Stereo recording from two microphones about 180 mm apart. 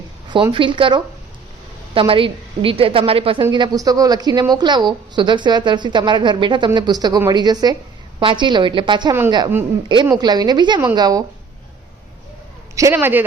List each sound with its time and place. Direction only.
0.5 s a woman's voice: 30° right (ahead or behind)
10.2 s a woman's voice: 20° right (ahead or behind)
12.7 s a man's voice: 15° right (ahead or behind)